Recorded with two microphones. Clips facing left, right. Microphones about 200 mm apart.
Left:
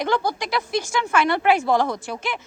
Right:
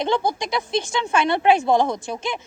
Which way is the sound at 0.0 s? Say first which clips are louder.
Right 1 dB; 25° right (ahead or behind).